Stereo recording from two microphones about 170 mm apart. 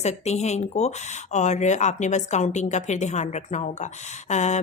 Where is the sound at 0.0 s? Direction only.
40° left (ahead or behind).